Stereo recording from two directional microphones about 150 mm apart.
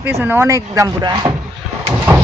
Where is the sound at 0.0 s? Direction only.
10° right (ahead or behind).